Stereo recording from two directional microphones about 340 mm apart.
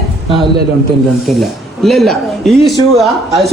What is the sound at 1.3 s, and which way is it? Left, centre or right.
A man's voice, centre.